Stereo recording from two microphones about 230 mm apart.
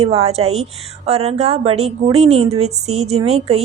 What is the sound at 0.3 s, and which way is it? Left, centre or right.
A woman's voice, right.